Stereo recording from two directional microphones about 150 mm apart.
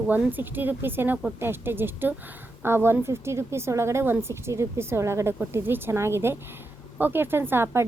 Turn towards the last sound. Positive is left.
turn(degrees=-15)  # may be behind; listen again after turning